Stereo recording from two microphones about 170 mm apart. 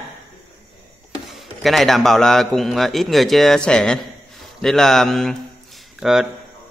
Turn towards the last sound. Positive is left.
turn(degrees=-5)  # may be behind; listen again after turning